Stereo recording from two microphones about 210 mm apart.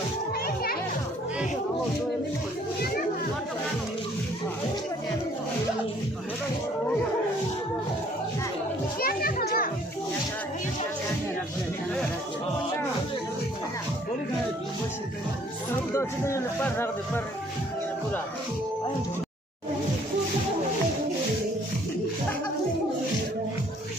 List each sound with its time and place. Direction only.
0.4 s children playing: 45° left (ahead or behind)
9.0 s children playing: 45° left (ahead or behind)
15.9 s speech: 15° left (ahead or behind)